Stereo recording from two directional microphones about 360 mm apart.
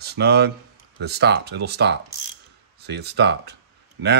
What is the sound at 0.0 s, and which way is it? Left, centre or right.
Speech, right.